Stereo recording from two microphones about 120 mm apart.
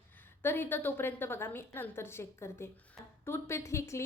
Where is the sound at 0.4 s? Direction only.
15° left (ahead or behind).